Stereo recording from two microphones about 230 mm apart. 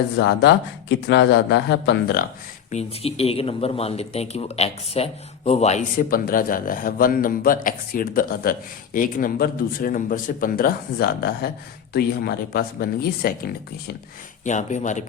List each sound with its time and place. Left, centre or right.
0.2 s speech: left
2.6 s a man's voice: left